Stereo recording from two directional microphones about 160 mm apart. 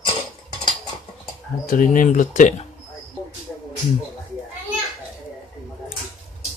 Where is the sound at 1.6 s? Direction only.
55° left (ahead or behind).